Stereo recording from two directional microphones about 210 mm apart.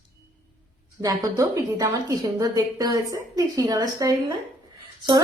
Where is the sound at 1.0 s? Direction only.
15° right (ahead or behind).